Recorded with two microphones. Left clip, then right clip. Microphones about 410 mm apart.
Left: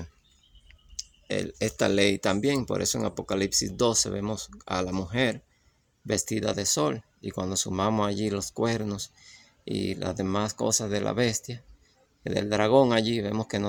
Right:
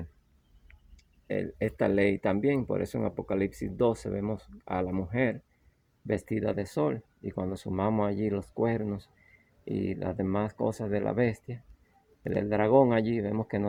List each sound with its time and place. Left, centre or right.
1.3 s speech: right